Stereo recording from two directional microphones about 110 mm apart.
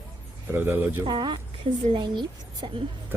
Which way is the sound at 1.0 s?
40° right (ahead or behind).